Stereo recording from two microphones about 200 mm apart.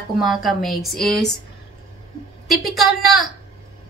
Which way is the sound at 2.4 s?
Centre (ahead or behind).